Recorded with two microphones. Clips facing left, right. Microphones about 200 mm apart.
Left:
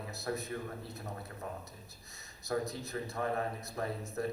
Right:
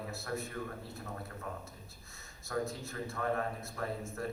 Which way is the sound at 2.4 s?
20° left (ahead or behind).